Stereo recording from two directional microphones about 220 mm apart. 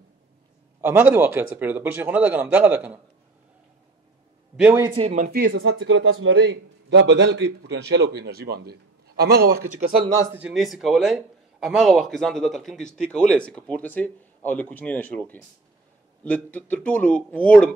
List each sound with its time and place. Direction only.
0.7 s a man's voice: 10° right (ahead or behind)
4.6 s a man's voice: 10° right (ahead or behind)
4.9 s speech: 30° right (ahead or behind)
5.5 s a man's voice: 60° right (ahead or behind); by 9.9 s 45° right (ahead or behind)
9.9 s a man's voice: 15° right (ahead or behind); by 17.6 s 5° left (ahead or behind)